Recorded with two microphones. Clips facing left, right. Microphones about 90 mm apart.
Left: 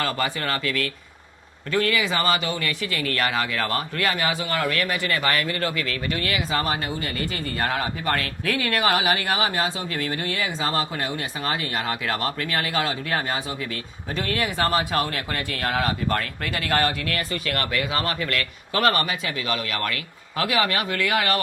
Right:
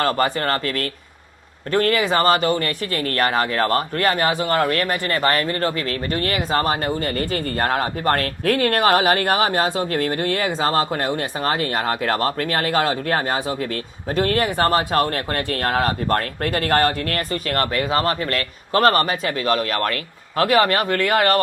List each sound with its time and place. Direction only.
0.0 s speech: 45° right (ahead or behind)